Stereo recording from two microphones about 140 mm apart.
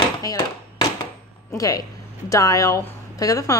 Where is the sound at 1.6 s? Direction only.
25° left (ahead or behind).